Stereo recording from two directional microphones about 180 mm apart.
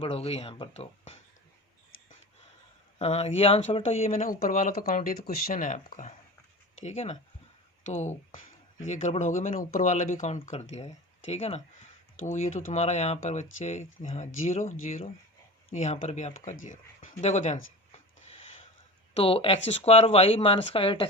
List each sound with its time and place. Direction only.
0.0 s speech: 35° left (ahead or behind)
3.0 s speech: 35° left (ahead or behind)
4.1 s speech: 50° left (ahead or behind)
8.9 s speech: 40° left (ahead or behind)
19.1 s speech: 30° left (ahead or behind)